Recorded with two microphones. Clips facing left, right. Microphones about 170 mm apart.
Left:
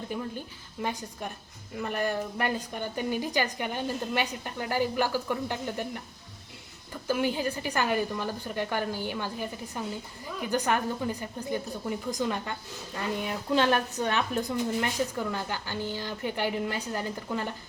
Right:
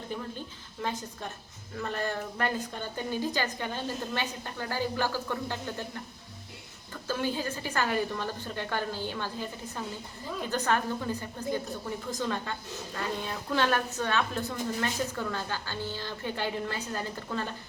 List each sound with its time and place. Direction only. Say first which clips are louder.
0.1 s a woman's voice: left 2 dB; 10° left (ahead or behind)
7.1 s a woman's voice: left 3 dB; 15° left (ahead or behind)